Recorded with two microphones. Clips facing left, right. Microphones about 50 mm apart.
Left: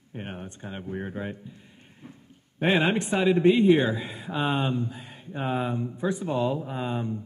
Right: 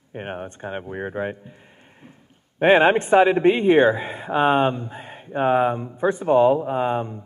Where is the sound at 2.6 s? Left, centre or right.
Right.